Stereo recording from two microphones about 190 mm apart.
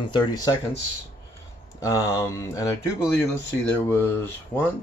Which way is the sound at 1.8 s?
15° left (ahead or behind).